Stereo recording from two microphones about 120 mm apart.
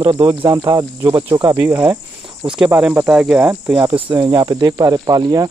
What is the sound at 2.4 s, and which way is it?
Speech, 10° right (ahead or behind).